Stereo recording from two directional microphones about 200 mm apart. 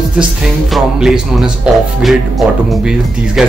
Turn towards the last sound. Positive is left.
turn(degrees=-5)  # may be behind; listen again after turning